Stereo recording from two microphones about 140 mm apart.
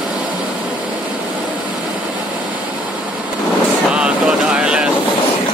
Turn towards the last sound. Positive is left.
turn(degrees=-5)  # may be behind; listen again after turning